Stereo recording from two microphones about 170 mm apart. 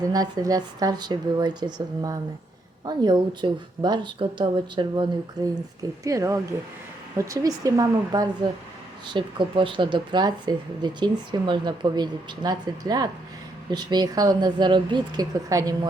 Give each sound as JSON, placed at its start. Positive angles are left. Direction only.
{"t": 0.0, "sound": "speech", "side_deg": -20}